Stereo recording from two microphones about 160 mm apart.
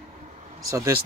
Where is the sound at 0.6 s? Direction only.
20° right (ahead or behind).